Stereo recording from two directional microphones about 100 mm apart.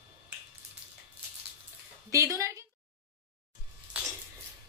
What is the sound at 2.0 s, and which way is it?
Speech, 35° right (ahead or behind).